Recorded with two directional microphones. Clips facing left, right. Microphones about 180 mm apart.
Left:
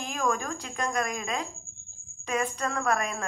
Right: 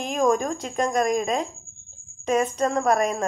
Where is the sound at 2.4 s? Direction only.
20° right (ahead or behind).